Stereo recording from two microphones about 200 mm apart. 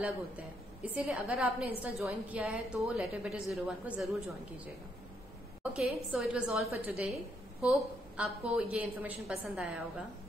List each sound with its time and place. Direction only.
0.8 s a woman's voice: 5° right (ahead or behind)
5.6 s a woman's voice: 5° right (ahead or behind)
8.2 s a woman's voice: 5° right (ahead or behind)